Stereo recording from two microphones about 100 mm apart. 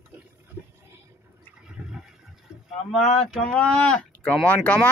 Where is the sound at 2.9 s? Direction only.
5° left (ahead or behind).